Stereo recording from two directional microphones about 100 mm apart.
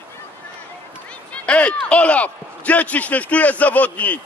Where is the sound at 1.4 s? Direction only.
10° left (ahead or behind).